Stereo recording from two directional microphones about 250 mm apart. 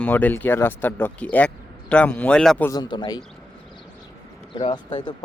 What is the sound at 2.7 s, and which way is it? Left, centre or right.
Speech, centre.